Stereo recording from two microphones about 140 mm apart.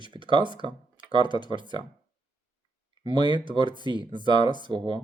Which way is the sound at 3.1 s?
35° right (ahead or behind).